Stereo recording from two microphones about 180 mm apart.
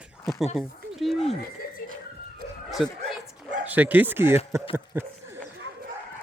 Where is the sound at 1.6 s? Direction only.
55° left (ahead or behind).